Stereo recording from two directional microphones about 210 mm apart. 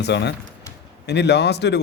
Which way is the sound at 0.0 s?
55° left (ahead or behind).